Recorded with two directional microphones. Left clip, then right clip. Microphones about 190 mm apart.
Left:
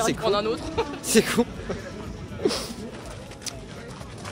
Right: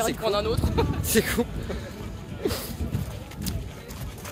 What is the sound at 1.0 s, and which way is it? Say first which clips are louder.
Speech: left 6 dB; 15° left (ahead or behind).